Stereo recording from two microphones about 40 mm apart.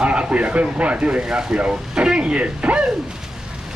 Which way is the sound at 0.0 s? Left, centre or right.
Right.